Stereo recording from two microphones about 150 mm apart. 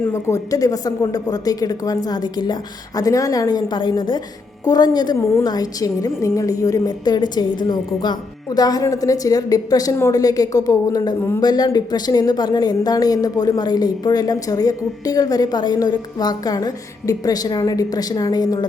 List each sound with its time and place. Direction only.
0.0 s a woman's voice: 20° left (ahead or behind)
11.2 s speech: 15° left (ahead or behind)
11.4 s a woman's voice: 25° left (ahead or behind)